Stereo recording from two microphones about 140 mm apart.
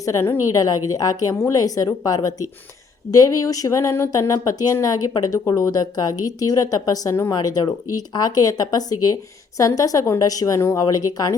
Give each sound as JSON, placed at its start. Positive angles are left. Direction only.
{"t": 0.0, "sound": "speech", "side_deg": 20}